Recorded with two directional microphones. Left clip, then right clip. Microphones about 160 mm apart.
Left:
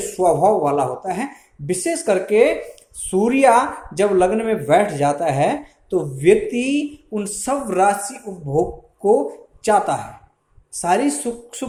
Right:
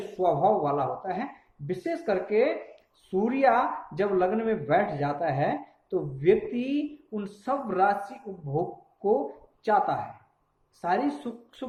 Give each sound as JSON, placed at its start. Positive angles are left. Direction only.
{"t": 0.2, "sound": "speech", "side_deg": 45}
{"t": 9.6, "sound": "a woman's voice", "side_deg": 40}